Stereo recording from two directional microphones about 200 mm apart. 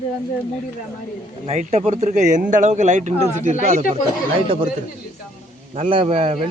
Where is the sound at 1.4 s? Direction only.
35° right (ahead or behind).